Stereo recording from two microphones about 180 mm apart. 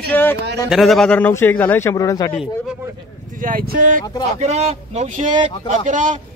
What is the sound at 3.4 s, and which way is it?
A man's voice, 50° right (ahead or behind).